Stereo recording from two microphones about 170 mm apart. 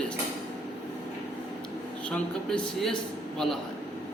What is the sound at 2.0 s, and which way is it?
A man's voice, 5° left (ahead or behind).